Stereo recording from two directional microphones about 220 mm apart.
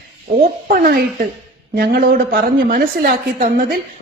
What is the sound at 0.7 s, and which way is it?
Speech, 45° right (ahead or behind).